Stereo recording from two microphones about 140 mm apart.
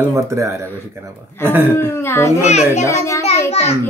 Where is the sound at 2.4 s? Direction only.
50° left (ahead or behind).